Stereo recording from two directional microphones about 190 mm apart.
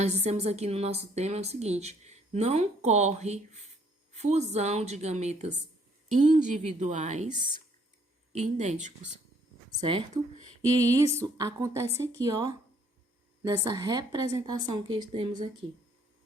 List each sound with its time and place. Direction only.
0.0 s a woman's voice: 35° right (ahead or behind)
9.6 s a woman's voice: 25° right (ahead or behind)